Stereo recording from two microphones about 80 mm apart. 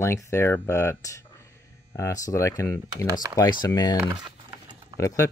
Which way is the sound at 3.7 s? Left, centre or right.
Left.